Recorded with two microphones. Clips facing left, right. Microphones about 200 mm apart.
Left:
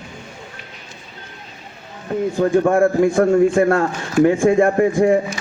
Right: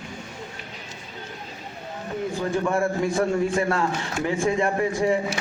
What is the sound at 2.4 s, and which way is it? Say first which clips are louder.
A man's voice: left 10 dB; 50° left (ahead or behind).